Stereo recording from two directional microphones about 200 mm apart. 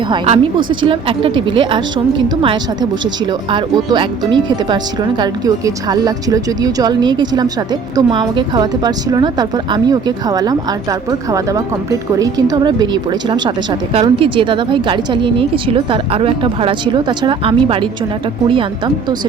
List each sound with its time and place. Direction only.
0.1 s speech: 25° right (ahead or behind)